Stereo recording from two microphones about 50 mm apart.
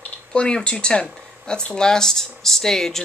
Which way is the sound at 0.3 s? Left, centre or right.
Centre.